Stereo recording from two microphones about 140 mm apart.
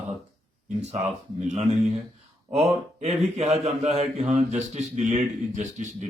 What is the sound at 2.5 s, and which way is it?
A man's voice, 50° right (ahead or behind).